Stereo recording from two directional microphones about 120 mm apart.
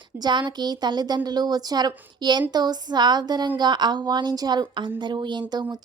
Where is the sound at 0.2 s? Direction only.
40° right (ahead or behind).